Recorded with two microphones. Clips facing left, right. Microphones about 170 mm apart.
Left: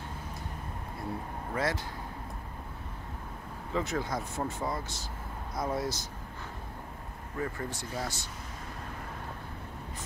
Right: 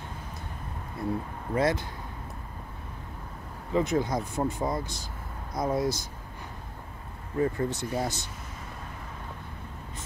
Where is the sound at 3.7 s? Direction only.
15° right (ahead or behind).